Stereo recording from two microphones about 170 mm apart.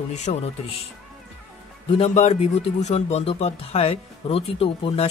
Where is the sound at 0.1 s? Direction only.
40° left (ahead or behind).